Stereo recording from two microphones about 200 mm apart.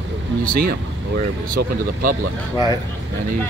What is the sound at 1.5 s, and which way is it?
Speech, 45° right (ahead or behind).